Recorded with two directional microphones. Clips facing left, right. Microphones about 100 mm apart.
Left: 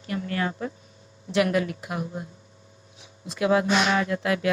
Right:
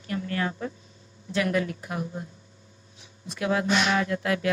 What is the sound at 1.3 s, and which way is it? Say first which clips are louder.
Speech: left 3 dB; 20° left (ahead or behind).